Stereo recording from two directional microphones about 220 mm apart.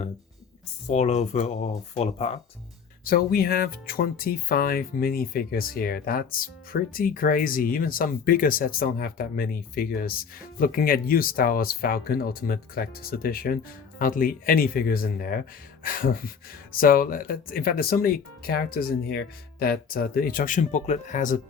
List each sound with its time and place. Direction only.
0.9 s speech: 30° left (ahead or behind)
3.0 s speech: 40° left (ahead or behind)